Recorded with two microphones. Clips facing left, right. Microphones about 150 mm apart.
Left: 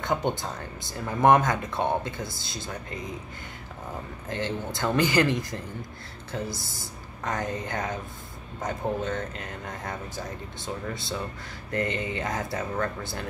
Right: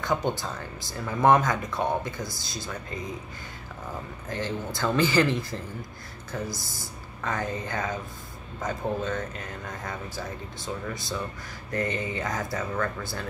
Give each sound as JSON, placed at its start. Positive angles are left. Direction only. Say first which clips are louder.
{"t": 0.0, "sound": "speech", "louder": "even", "side_deg": 20}
{"t": 4.3, "sound": "speech", "louder": "left 1 dB", "side_deg": 20}